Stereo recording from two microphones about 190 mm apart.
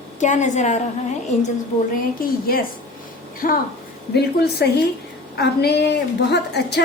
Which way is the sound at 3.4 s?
45° left (ahead or behind).